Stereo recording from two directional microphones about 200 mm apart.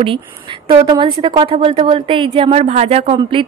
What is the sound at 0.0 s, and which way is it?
A woman's voice, 25° right (ahead or behind).